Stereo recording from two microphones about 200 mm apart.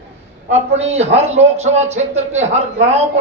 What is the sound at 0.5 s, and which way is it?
A man's voice, 30° right (ahead or behind).